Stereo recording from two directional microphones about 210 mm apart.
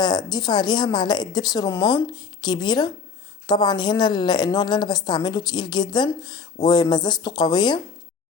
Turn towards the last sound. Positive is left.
turn(degrees=20)  # may be behind; listen again after turning